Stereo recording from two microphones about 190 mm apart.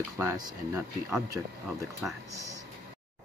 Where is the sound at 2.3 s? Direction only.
15° right (ahead or behind).